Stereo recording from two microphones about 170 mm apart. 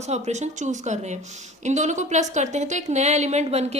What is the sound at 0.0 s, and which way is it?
A woman's voice, 40° right (ahead or behind).